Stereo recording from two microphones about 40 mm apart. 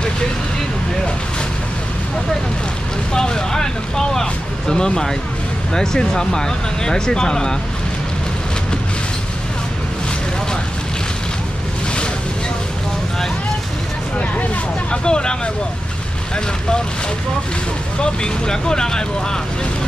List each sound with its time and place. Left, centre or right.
3.1 s vehicle: centre
5.7 s speech: centre
14.1 s speech: left
15.0 s speech: left
18.0 s speech: centre